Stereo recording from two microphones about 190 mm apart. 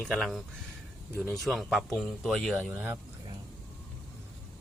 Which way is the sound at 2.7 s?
10° right (ahead or behind).